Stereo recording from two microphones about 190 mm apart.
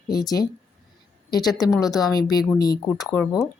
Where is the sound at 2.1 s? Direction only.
20° left (ahead or behind).